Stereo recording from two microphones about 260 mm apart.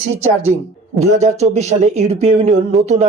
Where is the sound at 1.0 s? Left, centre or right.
Right.